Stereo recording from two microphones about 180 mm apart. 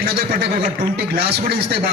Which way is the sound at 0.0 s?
65° right (ahead or behind).